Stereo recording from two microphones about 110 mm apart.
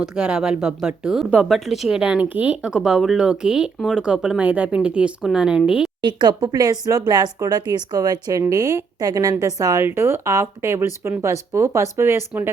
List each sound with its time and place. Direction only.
0.0 s speech: 5° right (ahead or behind)
6.0 s speech: 45° right (ahead or behind); by 12.5 s 20° right (ahead or behind)